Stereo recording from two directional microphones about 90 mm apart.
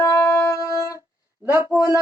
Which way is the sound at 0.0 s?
35° left (ahead or behind).